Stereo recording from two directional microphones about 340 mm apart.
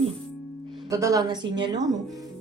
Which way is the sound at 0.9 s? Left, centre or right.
Centre.